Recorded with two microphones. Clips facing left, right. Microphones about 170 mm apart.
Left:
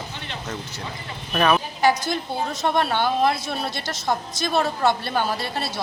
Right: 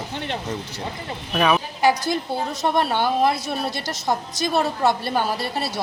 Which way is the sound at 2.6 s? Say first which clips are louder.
Right 1 dB; 10° right (ahead or behind).